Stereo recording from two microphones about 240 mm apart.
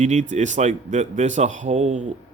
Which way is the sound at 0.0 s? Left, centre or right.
Right.